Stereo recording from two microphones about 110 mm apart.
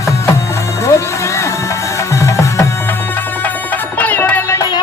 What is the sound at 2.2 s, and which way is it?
Music, 30° left (ahead or behind).